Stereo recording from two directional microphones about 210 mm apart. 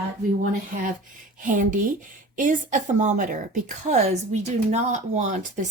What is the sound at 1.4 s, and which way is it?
A woman's voice, 40° right (ahead or behind).